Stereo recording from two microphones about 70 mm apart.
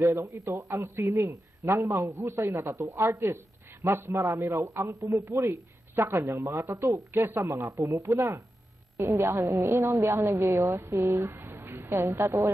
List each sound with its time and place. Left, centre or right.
0.5 s a man's voice: right
6.4 s a man's voice: right
7.8 s a man's voice: right
11.3 s a sound: right